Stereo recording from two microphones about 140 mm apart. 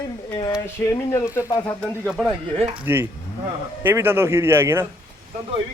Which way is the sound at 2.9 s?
15° right (ahead or behind).